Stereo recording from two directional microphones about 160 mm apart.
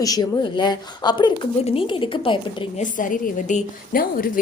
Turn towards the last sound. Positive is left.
turn(degrees=60)  # may be behind; listen again after turning